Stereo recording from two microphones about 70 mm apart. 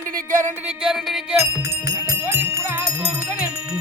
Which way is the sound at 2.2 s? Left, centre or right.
Right.